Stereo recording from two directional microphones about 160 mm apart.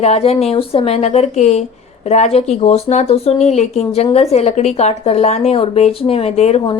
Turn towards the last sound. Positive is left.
turn(degrees=40)  # may be behind; listen again after turning